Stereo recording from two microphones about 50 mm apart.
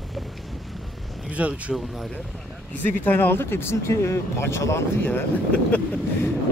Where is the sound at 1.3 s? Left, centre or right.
Right.